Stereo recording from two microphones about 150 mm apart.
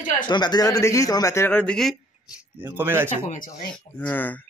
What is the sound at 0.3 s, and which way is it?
A man's voice, 30° left (ahead or behind).